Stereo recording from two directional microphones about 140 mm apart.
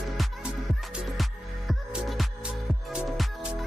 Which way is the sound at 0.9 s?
Centre (ahead or behind).